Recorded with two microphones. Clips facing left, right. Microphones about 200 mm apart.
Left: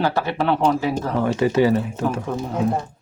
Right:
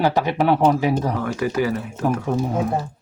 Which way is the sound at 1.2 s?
25° left (ahead or behind).